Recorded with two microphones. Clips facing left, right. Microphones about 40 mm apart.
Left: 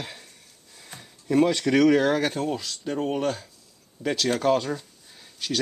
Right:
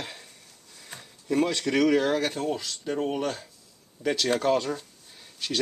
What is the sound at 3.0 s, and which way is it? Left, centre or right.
Speech, centre.